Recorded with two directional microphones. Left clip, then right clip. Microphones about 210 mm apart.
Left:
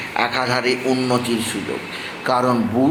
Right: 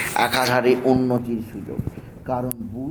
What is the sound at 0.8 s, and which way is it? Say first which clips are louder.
Speech: even; 15° left (ahead or behind).